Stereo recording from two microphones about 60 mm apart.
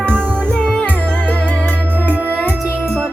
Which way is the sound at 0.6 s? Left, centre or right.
Centre.